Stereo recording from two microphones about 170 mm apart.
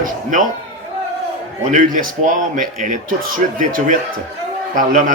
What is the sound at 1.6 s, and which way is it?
A man's voice, 50° right (ahead or behind).